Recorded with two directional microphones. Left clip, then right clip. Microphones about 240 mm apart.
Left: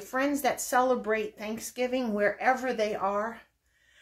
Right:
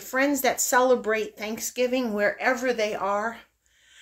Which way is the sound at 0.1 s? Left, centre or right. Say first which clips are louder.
Right 4 dB; right.